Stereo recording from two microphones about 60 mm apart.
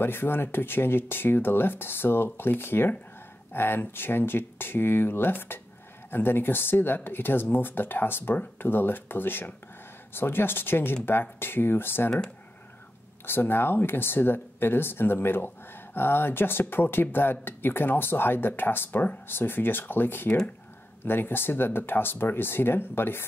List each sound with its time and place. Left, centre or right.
0.0 s speech: left
13.2 s speech: left